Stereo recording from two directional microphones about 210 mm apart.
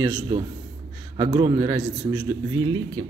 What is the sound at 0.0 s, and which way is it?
A man's voice, 20° right (ahead or behind).